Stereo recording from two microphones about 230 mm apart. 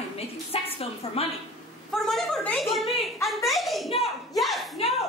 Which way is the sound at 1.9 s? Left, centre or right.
Centre.